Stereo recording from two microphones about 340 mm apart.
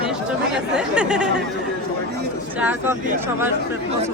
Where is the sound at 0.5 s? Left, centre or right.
Centre.